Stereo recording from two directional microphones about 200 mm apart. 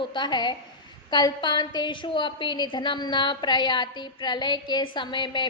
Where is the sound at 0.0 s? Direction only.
25° left (ahead or behind).